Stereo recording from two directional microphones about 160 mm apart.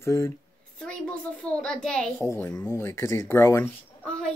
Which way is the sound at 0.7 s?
5° left (ahead or behind).